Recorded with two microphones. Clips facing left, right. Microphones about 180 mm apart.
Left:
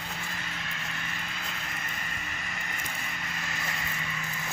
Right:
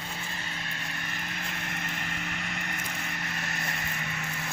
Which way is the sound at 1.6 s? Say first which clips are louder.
Right 3 dB; 65° right (ahead or behind).